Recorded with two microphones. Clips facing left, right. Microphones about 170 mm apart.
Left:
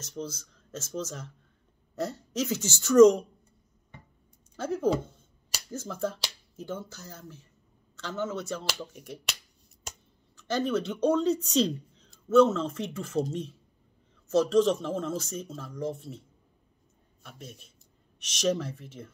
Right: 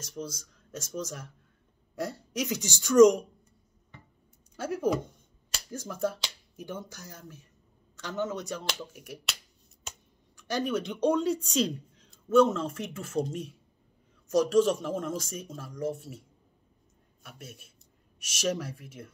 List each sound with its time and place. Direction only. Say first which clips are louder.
0.0 s speech: left 1 dB; 10° right (ahead or behind)
4.6 s a man's voice: left 1 dB; 10° right (ahead or behind)
10.3 s speech: left 2 dB; 10° right (ahead or behind)